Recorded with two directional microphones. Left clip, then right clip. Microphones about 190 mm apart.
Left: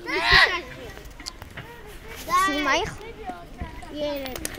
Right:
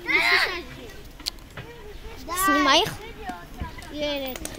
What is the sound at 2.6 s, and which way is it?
Speech, 30° right (ahead or behind).